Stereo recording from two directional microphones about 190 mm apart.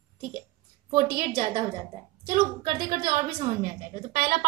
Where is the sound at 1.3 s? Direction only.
30° right (ahead or behind).